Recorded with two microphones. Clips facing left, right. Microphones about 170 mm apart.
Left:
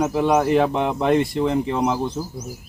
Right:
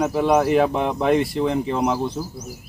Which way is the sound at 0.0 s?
Centre (ahead or behind).